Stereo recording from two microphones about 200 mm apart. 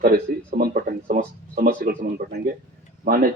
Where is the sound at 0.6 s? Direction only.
50° right (ahead or behind).